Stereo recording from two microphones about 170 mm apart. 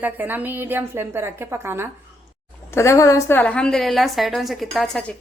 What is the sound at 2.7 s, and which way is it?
A woman's voice, 15° left (ahead or behind).